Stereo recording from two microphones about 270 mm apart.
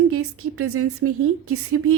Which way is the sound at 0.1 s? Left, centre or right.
Right.